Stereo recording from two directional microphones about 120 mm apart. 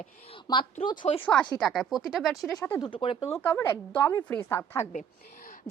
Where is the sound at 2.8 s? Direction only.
45° left (ahead or behind).